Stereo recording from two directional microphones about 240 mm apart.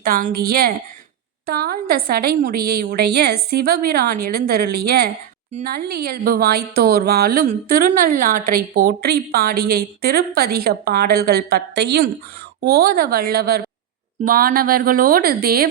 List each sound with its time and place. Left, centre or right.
0.0 s a woman's voice: right